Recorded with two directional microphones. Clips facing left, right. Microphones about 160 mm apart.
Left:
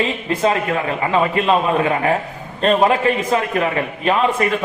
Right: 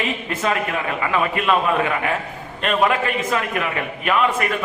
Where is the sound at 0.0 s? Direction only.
30° left (ahead or behind).